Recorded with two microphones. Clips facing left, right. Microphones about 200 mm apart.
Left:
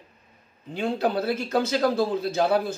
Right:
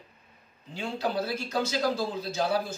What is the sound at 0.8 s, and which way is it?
A man's voice, 55° left (ahead or behind).